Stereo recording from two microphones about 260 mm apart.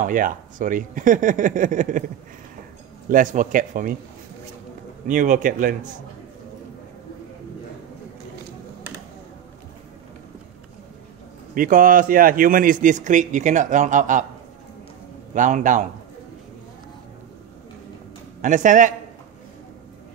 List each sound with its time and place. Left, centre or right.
0.0 s speech: right
3.1 s speech: right
5.0 s speech: right
11.5 s a man's voice: right
15.3 s a man's voice: right
18.4 s a man's voice: right